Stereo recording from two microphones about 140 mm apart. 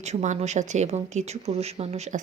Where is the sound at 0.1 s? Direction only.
55° right (ahead or behind).